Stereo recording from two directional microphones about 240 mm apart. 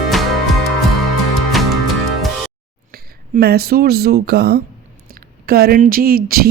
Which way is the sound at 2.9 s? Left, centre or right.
Right.